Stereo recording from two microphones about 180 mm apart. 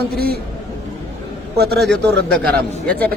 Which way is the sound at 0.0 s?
60° right (ahead or behind).